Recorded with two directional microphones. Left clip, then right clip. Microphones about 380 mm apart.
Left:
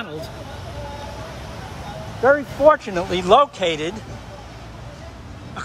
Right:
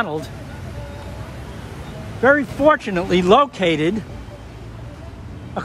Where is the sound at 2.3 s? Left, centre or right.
Right.